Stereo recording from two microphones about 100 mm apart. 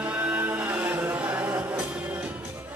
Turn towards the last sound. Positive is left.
turn(degrees=-20)  # may be behind; listen again after turning